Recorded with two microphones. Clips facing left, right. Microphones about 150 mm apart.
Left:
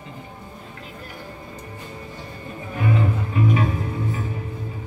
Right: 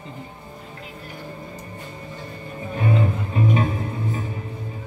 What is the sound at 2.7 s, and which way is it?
Music, 30° right (ahead or behind).